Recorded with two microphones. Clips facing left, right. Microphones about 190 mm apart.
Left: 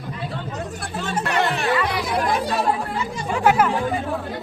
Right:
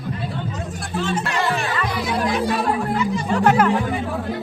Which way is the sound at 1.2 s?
60° left (ahead or behind).